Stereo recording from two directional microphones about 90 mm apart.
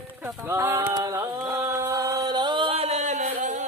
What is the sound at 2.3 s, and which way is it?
Music, 60° right (ahead or behind).